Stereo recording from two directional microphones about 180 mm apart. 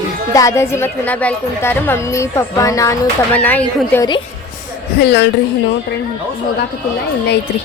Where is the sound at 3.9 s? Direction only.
20° left (ahead or behind).